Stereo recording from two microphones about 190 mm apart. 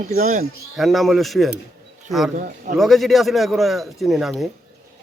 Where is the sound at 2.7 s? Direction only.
Centre (ahead or behind).